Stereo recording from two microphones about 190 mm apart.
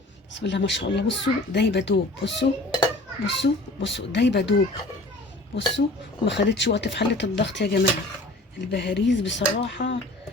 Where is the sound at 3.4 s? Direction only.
70° left (ahead or behind).